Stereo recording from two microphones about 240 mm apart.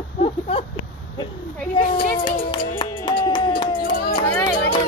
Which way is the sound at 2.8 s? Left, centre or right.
Centre.